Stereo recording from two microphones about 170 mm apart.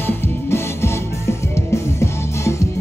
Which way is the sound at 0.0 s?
15° left (ahead or behind).